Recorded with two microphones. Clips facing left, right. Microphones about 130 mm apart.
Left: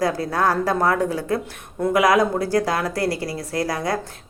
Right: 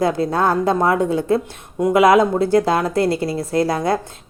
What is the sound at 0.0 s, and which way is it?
Speech, 25° right (ahead or behind).